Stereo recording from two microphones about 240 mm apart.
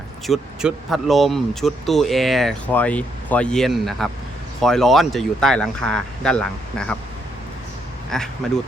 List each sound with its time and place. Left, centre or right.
0.3 s speech: centre
8.1 s speech: centre